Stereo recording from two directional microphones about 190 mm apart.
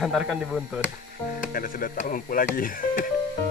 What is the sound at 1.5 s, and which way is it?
Speech, 50° left (ahead or behind).